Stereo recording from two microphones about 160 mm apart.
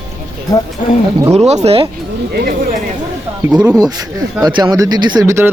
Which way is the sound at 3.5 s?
5° right (ahead or behind).